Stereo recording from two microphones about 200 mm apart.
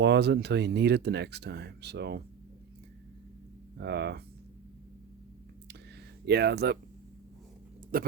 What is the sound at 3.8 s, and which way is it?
Speech, 55° right (ahead or behind).